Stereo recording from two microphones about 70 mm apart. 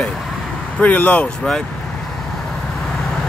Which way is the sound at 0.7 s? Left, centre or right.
Left.